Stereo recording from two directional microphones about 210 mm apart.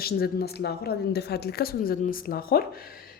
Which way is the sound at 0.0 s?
45° left (ahead or behind).